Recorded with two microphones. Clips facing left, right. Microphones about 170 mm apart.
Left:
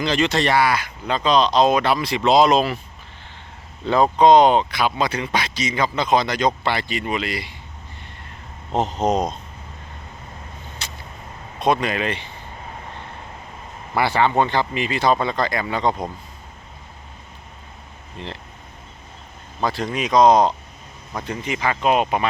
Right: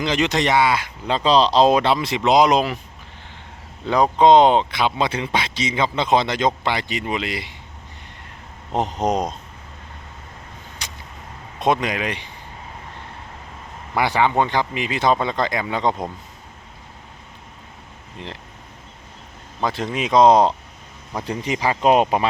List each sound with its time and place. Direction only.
0.0 s speech: 15° right (ahead or behind)
3.8 s speech: 15° right (ahead or behind)
8.7 s speech: 15° right (ahead or behind)
10.8 s vehicle: 15° right (ahead or behind)
11.6 s speech: 20° right (ahead or behind)
13.9 s speech: 15° right (ahead or behind)
18.2 s speech: 15° right (ahead or behind)
19.6 s speech: 20° right (ahead or behind)